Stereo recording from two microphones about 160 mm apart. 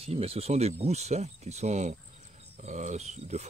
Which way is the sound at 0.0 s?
40° right (ahead or behind).